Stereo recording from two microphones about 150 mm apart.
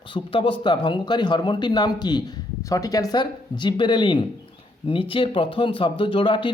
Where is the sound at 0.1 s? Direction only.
35° left (ahead or behind).